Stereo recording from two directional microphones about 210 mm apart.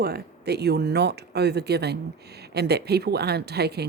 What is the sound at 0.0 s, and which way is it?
A woman's voice, 50° right (ahead or behind).